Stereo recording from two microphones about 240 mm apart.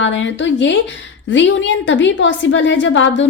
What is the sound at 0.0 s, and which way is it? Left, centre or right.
Speech, left.